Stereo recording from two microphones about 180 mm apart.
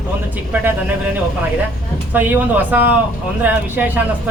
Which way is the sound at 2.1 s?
10° right (ahead or behind).